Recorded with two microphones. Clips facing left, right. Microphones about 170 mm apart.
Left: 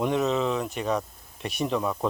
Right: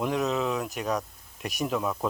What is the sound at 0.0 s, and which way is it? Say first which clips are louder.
Speech: left 2 dB; centre (ahead or behind).